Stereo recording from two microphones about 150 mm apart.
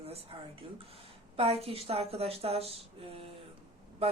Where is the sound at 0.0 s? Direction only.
40° right (ahead or behind).